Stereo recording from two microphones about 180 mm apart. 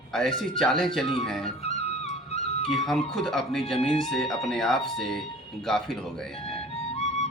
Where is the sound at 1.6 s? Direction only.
35° left (ahead or behind).